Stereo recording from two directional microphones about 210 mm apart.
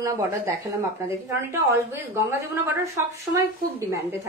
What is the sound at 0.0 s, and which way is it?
A woman's voice, 15° right (ahead or behind).